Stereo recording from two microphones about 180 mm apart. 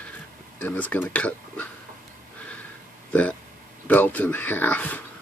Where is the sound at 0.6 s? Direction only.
10° left (ahead or behind).